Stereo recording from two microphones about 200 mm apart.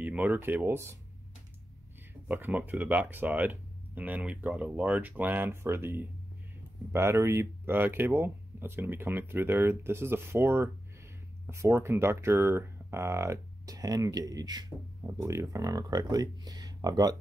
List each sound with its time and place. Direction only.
0.0 s speech: 10° right (ahead or behind)
2.2 s speech: 10° right (ahead or behind)